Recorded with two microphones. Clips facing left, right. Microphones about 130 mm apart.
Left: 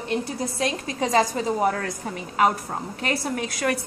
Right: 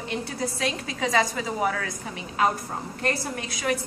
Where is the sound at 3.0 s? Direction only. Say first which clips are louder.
Left 2 dB; 65° left (ahead or behind).